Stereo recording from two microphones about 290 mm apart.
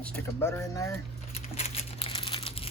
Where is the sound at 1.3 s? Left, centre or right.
Centre.